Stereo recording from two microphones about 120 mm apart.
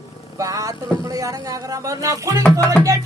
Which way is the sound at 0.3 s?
30° right (ahead or behind).